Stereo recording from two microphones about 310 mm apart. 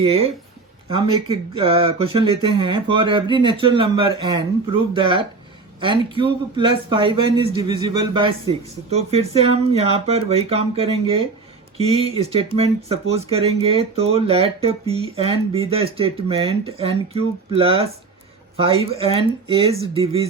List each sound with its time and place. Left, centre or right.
0.0 s speech: centre